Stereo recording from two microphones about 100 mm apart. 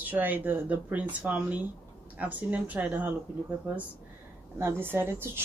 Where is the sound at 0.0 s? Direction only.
15° right (ahead or behind).